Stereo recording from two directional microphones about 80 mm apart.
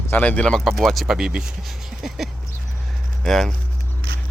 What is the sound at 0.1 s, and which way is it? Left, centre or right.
Speech, centre.